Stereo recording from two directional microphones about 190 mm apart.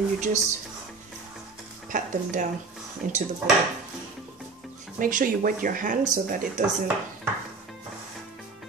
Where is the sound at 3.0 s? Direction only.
45° right (ahead or behind).